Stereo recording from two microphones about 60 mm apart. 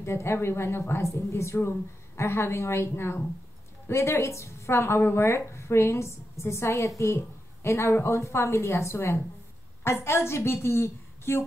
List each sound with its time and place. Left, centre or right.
0.0 s speech: left